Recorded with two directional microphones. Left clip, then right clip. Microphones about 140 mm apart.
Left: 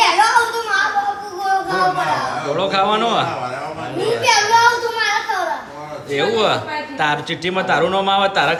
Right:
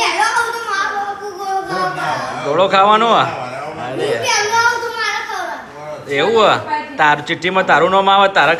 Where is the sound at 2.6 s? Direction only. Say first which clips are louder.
Right 7 dB; 15° left (ahead or behind).